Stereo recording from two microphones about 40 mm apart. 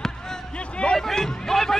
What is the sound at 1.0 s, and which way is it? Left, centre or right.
Speech, centre.